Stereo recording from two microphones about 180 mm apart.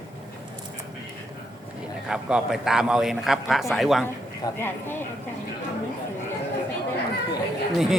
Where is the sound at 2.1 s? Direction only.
5° right (ahead or behind).